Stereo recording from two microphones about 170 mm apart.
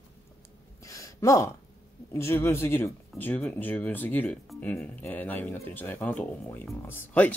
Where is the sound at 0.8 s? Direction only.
20° left (ahead or behind).